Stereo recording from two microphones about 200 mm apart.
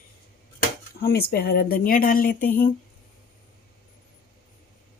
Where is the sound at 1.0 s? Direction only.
50° left (ahead or behind).